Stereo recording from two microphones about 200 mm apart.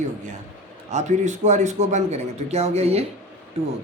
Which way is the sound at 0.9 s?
35° right (ahead or behind).